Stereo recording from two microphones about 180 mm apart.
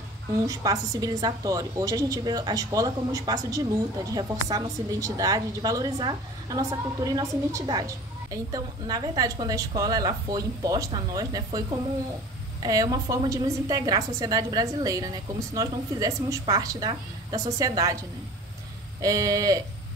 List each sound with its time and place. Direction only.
0.5 s a woman's voice: 20° right (ahead or behind)
12.6 s a woman's voice: 20° right (ahead or behind)
18.9 s a woman's voice: 20° right (ahead or behind)